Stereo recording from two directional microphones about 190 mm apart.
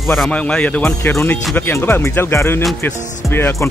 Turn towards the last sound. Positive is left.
turn(degrees=10)  # may be behind; listen again after turning